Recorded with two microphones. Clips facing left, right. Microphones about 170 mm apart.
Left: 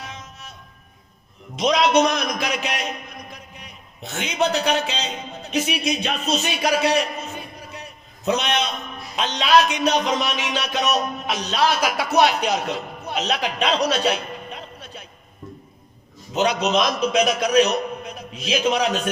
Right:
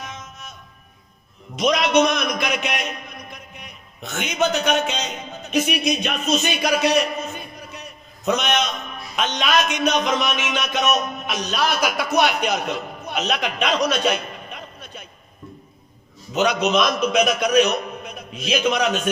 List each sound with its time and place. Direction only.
0.0 s music: 35° left (ahead or behind)
1.5 s a man's voice: 30° left (ahead or behind)
8.2 s a man's voice: 30° left (ahead or behind)
16.3 s a man's voice: 30° left (ahead or behind)